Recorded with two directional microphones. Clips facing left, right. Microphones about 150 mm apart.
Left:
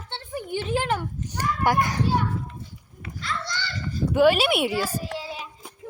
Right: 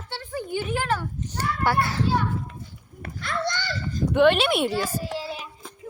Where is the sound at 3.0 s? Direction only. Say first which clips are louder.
Right 4 dB; 55° right (ahead or behind).